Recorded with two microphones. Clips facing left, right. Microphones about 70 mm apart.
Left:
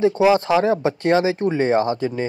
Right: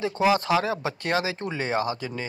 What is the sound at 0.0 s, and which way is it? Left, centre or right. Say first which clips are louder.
Speech: left 7 dB; left.